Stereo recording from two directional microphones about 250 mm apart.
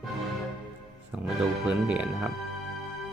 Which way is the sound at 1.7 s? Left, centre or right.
Centre.